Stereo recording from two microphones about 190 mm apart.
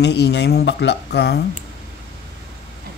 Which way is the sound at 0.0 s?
65° left (ahead or behind).